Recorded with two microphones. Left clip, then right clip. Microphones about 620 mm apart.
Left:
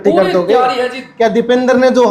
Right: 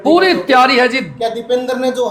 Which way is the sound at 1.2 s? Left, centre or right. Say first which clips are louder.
Left 8 dB; left.